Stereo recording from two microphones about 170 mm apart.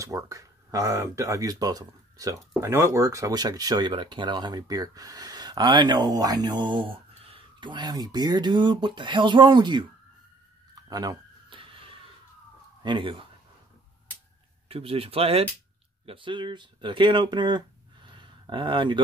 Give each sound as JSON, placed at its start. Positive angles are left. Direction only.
{"t": 0.0, "sound": "speech", "side_deg": -20}
{"t": 10.7, "sound": "a sound", "side_deg": -20}
{"t": 12.8, "sound": "speech", "side_deg": -30}
{"t": 14.7, "sound": "speech", "side_deg": -35}